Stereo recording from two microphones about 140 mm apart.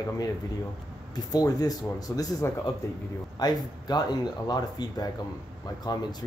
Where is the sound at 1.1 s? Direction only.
25° left (ahead or behind).